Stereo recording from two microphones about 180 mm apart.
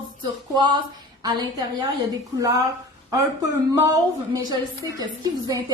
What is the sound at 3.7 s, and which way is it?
A woman's voice, 20° right (ahead or behind).